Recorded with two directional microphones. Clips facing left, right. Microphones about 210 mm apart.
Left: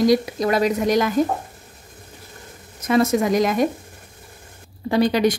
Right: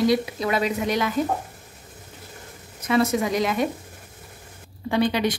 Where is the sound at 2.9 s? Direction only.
45° left (ahead or behind).